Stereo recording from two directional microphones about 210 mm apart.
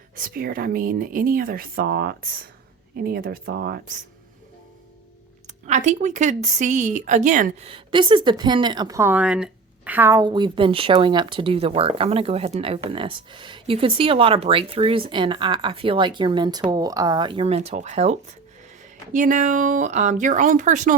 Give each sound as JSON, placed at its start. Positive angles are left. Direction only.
{"t": 0.2, "sound": "speech", "side_deg": -45}
{"t": 5.6, "sound": "speech", "side_deg": -35}
{"t": 7.7, "sound": "a woman's voice", "side_deg": -25}